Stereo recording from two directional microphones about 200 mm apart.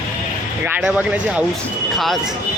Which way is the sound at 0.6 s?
5° right (ahead or behind).